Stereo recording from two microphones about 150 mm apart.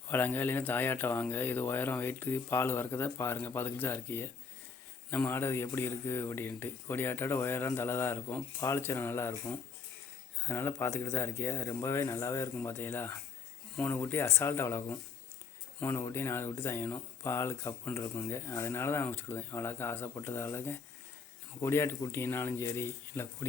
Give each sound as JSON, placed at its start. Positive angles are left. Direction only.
{"t": 0.1, "sound": "speech", "side_deg": 15}